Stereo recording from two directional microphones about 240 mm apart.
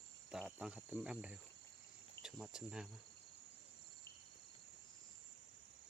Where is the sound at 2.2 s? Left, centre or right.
Centre.